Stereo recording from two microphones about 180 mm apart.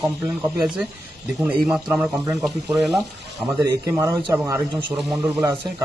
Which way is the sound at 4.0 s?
20° right (ahead or behind).